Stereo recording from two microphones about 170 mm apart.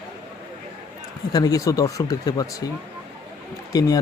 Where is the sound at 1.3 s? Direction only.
20° left (ahead or behind).